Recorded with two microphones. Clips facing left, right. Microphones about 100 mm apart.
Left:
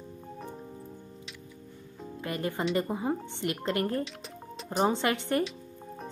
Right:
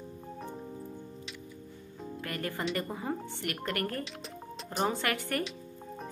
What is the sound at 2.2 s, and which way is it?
Speech, 20° left (ahead or behind).